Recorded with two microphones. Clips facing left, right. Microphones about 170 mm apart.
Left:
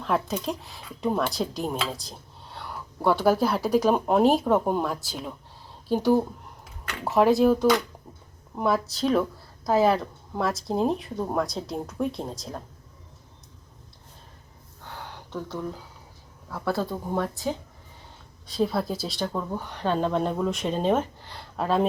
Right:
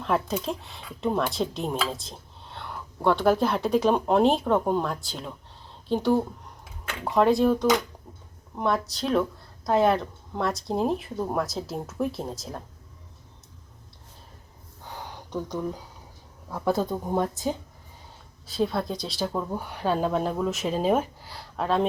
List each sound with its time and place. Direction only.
0.0 s speech: centre (ahead or behind)
14.8 s a sound: 15° right (ahead or behind)
16.5 s speech: 15° right (ahead or behind)
18.4 s speech: centre (ahead or behind)